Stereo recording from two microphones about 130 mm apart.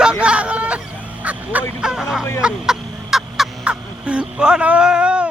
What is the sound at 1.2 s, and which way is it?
Fowl, 10° right (ahead or behind).